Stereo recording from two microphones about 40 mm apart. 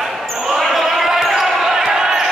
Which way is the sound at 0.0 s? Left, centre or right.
Centre.